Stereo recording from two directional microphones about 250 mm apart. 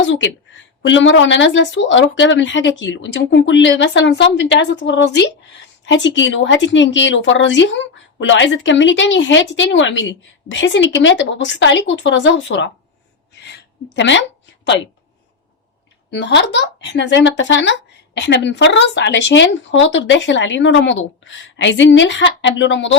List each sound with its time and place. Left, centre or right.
0.0 s a woman's voice: left
13.4 s a sound: left
16.0 s speech: left